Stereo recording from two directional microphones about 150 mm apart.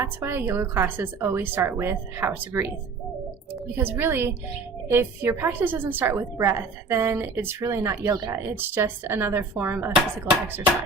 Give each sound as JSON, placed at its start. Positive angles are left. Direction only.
{"t": 0.0, "sound": "speech", "side_deg": -15}
{"t": 3.8, "sound": "speech", "side_deg": -15}
{"t": 8.1, "sound": "speech", "side_deg": -25}
{"t": 8.4, "sound": "speech", "side_deg": -15}